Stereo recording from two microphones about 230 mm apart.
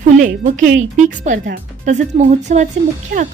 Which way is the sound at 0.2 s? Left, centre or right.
Right.